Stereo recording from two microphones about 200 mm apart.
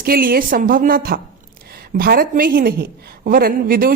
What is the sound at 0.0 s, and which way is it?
A woman's voice, 45° right (ahead or behind).